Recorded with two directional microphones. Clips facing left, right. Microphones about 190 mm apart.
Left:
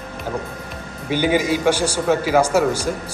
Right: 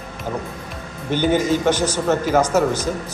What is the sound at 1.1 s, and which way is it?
A man's voice, 10° left (ahead or behind).